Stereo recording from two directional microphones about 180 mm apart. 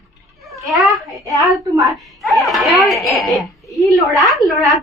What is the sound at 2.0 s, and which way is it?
Baby cry, centre (ahead or behind).